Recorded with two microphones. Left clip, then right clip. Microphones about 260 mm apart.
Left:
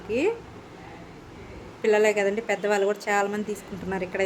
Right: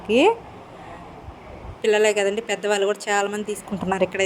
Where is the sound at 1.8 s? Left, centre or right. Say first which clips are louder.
Right 2 dB; right.